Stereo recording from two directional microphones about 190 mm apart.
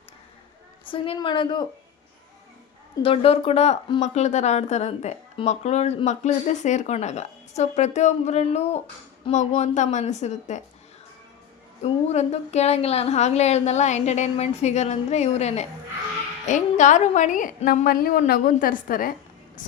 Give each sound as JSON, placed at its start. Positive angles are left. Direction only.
{"t": 0.9, "sound": "a woman's voice", "side_deg": 25}
{"t": 3.0, "sound": "speech", "side_deg": 30}
{"t": 11.8, "sound": "a woman's voice", "side_deg": 35}